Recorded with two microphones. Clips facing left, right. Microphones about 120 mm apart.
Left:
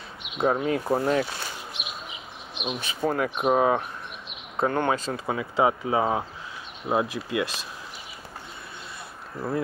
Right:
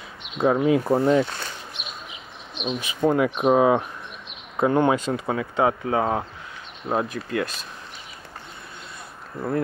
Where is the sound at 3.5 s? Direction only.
30° right (ahead or behind).